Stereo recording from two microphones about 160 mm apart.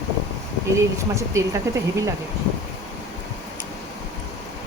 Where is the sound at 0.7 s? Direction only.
20° right (ahead or behind).